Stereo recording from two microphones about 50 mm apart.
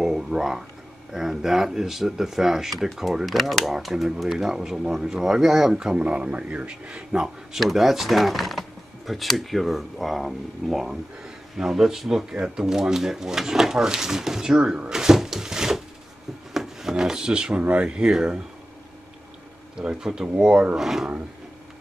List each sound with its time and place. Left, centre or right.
0.0 s a sound: centre
1.1 s speech: centre
5.9 s speech: right
7.5 s speech: centre
14.9 s drawer open or close: centre
16.5 s speech: centre
19.8 s speech: centre